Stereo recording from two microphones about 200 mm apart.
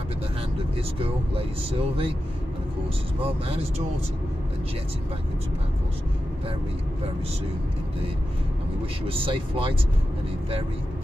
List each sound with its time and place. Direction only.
0.9 s speech: 30° right (ahead or behind)
3.2 s speech: 30° right (ahead or behind)
9.0 s speech: 25° right (ahead or behind)